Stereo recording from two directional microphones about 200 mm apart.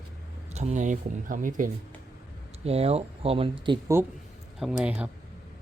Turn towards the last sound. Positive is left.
turn(degrees=-5)  # may be behind; listen again after turning